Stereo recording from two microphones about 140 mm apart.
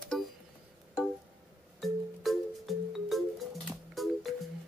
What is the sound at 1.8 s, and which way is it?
Music, centre (ahead or behind).